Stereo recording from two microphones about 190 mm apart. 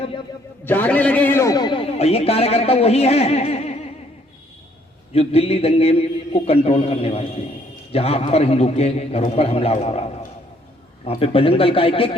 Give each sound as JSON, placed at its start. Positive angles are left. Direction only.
{"t": 0.6, "sound": "a man's voice", "side_deg": 10}
{"t": 5.1, "sound": "a man's voice", "side_deg": 30}